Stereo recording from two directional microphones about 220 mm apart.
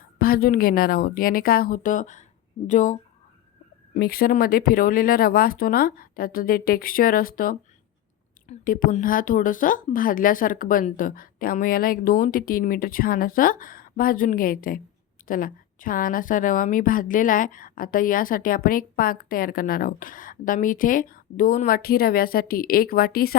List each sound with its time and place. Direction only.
0.2 s a woman's voice: 40° left (ahead or behind)